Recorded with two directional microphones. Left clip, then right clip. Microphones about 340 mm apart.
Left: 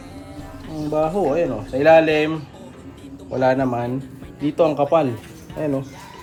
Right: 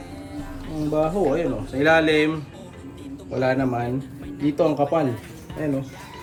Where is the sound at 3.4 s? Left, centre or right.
Centre.